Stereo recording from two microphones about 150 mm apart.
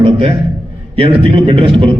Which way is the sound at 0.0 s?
35° right (ahead or behind).